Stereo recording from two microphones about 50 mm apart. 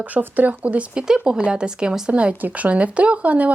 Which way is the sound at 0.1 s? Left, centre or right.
Right.